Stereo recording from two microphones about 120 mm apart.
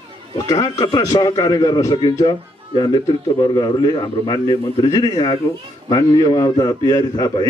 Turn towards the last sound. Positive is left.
turn(degrees=30)  # may be behind; listen again after turning